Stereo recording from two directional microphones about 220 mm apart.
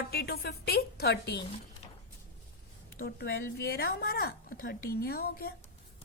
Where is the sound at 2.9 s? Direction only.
45° left (ahead or behind).